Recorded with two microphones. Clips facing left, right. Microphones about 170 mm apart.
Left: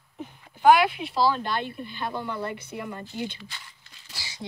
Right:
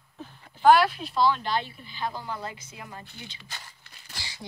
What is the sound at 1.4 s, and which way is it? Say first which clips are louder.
Speech: even; 55° left (ahead or behind).